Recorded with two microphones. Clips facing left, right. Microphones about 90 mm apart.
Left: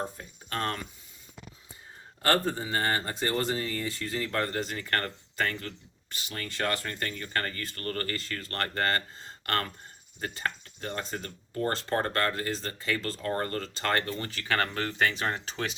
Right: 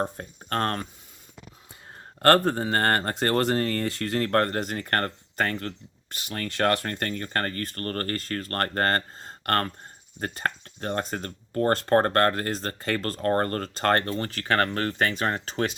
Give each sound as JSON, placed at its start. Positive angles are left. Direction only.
{"t": 0.0, "sound": "speech", "side_deg": -50}
{"t": 2.2, "sound": "speech", "side_deg": -55}